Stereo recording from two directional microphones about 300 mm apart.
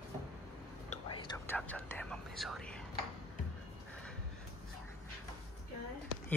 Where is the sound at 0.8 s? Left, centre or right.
Centre.